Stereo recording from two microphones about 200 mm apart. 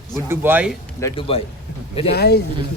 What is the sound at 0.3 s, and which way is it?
Speech, 10° right (ahead or behind).